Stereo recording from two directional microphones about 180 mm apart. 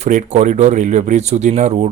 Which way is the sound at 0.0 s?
45° right (ahead or behind).